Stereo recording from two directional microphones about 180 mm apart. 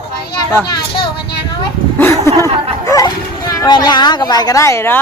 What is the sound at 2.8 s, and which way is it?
Speech, 20° left (ahead or behind).